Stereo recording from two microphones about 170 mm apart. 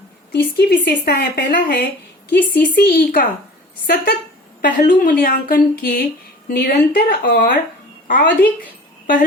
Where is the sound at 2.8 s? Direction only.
55° left (ahead or behind).